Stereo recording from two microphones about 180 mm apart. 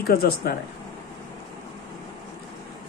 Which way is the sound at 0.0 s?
55° left (ahead or behind).